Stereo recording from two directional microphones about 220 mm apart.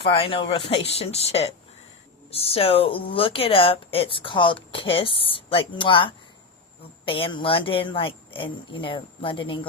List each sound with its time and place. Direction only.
0.1 s speech: 25° left (ahead or behind)